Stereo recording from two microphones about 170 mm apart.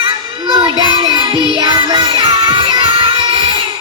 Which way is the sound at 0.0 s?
25° right (ahead or behind).